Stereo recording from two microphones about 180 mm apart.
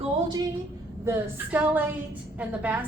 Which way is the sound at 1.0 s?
10° right (ahead or behind).